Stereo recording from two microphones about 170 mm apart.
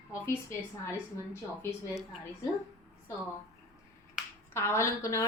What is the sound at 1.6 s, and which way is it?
Speech, centre (ahead or behind).